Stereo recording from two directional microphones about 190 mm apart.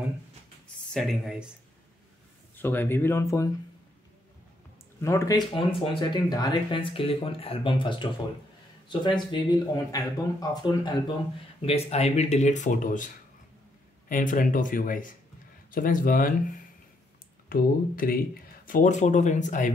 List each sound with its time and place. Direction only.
0.9 s speech: centre (ahead or behind)
2.5 s speech: 10° left (ahead or behind)
5.0 s speech: 15° left (ahead or behind)
11.6 s speech: 35° left (ahead or behind)
17.5 s speech: 50° left (ahead or behind)